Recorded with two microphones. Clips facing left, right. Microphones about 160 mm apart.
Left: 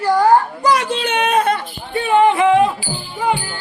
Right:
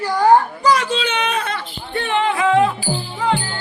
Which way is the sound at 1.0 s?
50° left (ahead or behind).